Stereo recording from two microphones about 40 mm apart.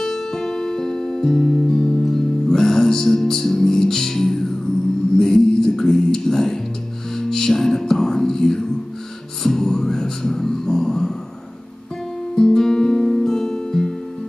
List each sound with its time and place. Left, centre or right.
0.0 s music: centre
1.7 s music: centre
9.4 s beatboxing: centre
12.4 s music: centre